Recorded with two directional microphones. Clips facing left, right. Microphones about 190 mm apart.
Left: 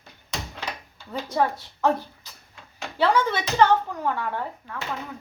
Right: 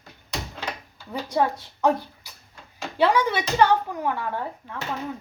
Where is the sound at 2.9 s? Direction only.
15° right (ahead or behind).